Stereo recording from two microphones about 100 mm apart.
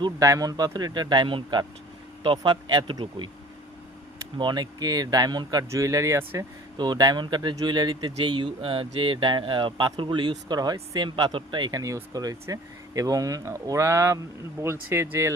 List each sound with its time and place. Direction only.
0.2 s speech: 35° right (ahead or behind); by 3.2 s 55° right (ahead or behind)
4.4 s speech: 45° right (ahead or behind)
5.7 s speech: 35° right (ahead or behind)
6.7 s speech: 45° right (ahead or behind)
12.1 s speech: 35° right (ahead or behind)